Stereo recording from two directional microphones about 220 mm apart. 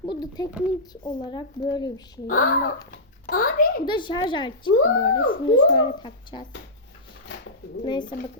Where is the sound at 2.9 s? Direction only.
40° left (ahead or behind).